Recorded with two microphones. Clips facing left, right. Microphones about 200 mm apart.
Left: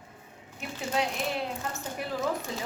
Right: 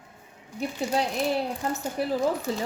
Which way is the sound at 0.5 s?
35° right (ahead or behind).